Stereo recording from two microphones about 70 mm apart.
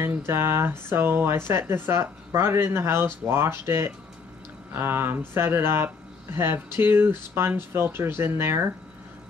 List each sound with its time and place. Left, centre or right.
0.0 s speech: right